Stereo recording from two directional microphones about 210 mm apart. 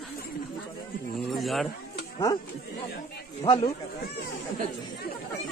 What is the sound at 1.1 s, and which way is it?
Speech, centre (ahead or behind).